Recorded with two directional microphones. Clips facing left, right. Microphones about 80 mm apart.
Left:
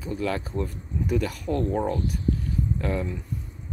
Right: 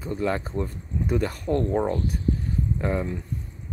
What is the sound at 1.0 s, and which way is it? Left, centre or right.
Speech, right.